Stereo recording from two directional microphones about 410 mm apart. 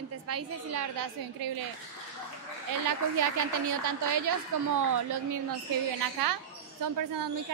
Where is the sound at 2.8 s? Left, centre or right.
Right.